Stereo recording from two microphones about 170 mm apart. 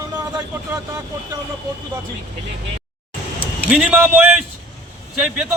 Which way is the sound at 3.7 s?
5° right (ahead or behind).